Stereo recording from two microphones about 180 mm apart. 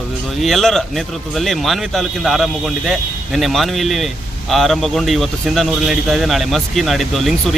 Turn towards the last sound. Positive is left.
turn(degrees=0)  # may be behind; listen again after turning